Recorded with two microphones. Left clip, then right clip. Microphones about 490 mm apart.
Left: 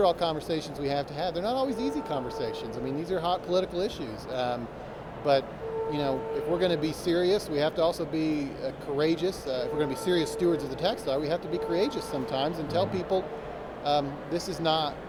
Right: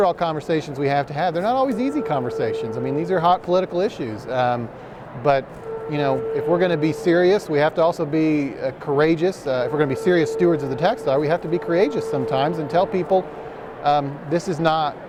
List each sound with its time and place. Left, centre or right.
0.0 s speech: right